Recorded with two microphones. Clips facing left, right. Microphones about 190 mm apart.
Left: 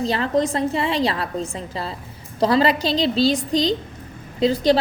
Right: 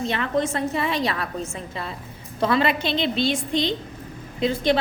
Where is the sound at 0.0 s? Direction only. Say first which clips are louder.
Left 3 dB; 35° left (ahead or behind).